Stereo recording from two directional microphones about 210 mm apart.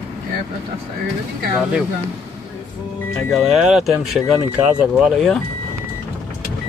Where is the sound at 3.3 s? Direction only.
Centre (ahead or behind).